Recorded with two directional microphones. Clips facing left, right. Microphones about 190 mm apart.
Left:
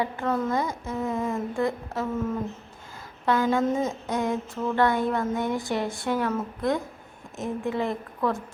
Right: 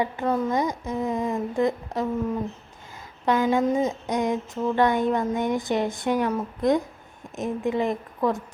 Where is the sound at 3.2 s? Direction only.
15° right (ahead or behind).